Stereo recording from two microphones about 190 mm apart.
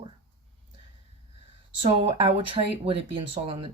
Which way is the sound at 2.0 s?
30° right (ahead or behind).